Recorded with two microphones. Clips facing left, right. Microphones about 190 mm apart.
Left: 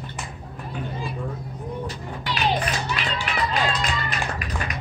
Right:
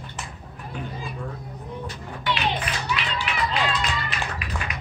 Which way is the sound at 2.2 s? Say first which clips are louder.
Left 2 dB; 40° left (ahead or behind).